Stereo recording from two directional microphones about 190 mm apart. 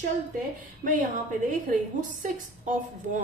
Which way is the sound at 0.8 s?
45° right (ahead or behind).